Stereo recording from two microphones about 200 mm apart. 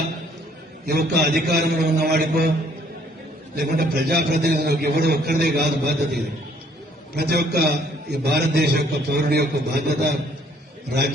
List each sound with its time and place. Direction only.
0.9 s a man's voice: 50° right (ahead or behind)
3.5 s a man's voice: 50° right (ahead or behind)